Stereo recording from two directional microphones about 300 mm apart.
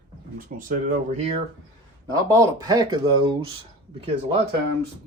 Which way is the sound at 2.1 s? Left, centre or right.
Centre.